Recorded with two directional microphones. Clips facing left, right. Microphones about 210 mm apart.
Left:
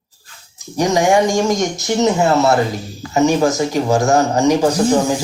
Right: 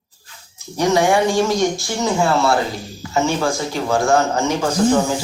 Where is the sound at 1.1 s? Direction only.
45° left (ahead or behind).